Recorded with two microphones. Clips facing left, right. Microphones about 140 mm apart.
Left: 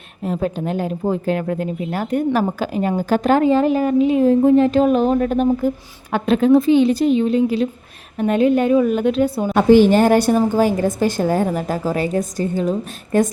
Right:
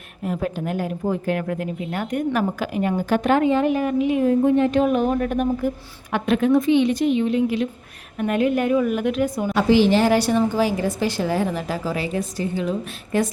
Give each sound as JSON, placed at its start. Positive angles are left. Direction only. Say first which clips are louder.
{"t": 0.3, "sound": "a woman's voice", "louder": "left 3 dB", "side_deg": 30}
{"t": 9.6, "sound": "a woman's voice", "louder": "left 5 dB", "side_deg": 50}